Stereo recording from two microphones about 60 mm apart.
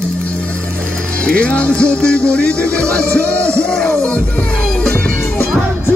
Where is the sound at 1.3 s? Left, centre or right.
Left.